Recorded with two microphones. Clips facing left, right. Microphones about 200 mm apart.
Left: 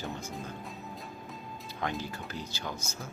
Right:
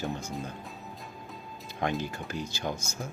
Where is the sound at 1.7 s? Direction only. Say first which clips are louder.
Right 4 dB; 20° right (ahead or behind).